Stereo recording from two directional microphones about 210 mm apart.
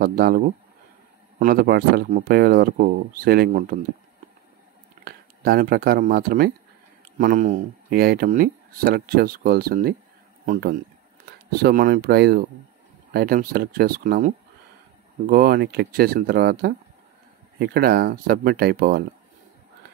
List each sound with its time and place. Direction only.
0.0 s speech: 45° right (ahead or behind)
5.0 s speech: 45° right (ahead or behind)